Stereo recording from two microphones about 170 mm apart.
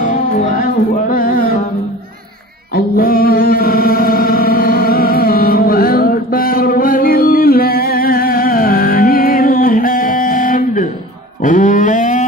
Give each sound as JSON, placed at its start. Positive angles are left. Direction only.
{"t": 0.0, "sound": "music", "side_deg": 45}
{"t": 2.7, "sound": "music", "side_deg": 60}
{"t": 11.4, "sound": "a sound", "side_deg": 50}